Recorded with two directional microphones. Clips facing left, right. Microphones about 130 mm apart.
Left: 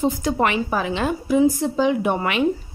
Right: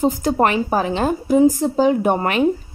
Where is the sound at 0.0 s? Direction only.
45° right (ahead or behind).